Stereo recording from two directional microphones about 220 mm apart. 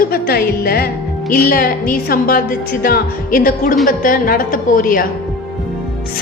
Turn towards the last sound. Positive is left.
turn(degrees=40)  # may be behind; listen again after turning